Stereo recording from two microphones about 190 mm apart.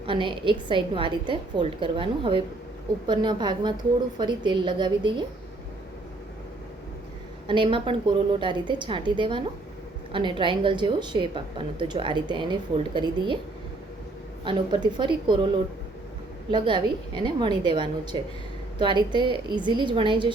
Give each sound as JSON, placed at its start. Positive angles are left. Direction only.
{"t": 0.0, "sound": "a woman's voice", "side_deg": -25}
{"t": 7.4, "sound": "a woman's voice", "side_deg": -25}
{"t": 14.4, "sound": "a woman's voice", "side_deg": -25}
{"t": 16.5, "sound": "a woman's voice", "side_deg": -25}